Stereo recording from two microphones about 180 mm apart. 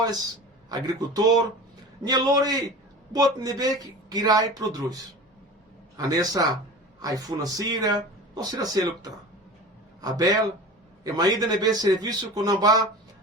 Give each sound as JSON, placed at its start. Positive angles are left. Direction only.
{"t": 0.7, "sound": "speech", "side_deg": -20}